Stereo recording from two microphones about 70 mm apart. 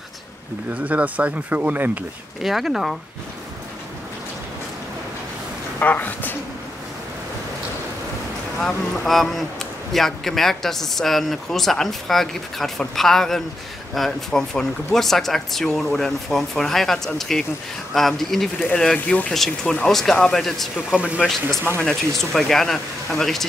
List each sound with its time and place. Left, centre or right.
0.8 s speech: right
2.4 s speech: centre
5.8 s a man's voice: left
8.5 s speech: centre
18.9 s a man's voice: left
19.3 s speech: centre
20.9 s speech: centre
21.8 s speech: centre